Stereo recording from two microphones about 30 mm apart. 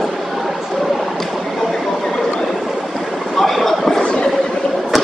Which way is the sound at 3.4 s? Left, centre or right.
Centre.